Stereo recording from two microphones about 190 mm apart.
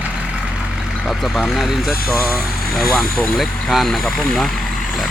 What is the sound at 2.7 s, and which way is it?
Speech, centre (ahead or behind).